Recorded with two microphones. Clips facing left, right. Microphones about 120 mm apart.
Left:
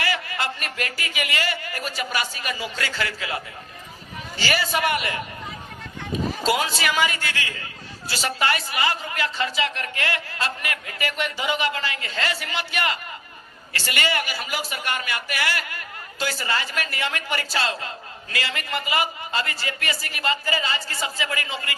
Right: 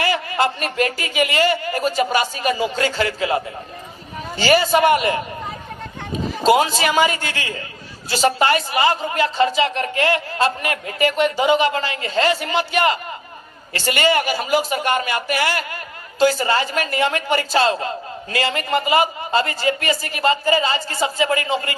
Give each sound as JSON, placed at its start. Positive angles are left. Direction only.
{"t": 0.0, "sound": "a man's voice", "side_deg": -30}
{"t": 6.4, "sound": "a man's voice", "side_deg": -25}